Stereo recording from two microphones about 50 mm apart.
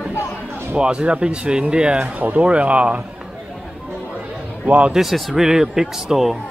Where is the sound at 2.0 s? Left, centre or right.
Right.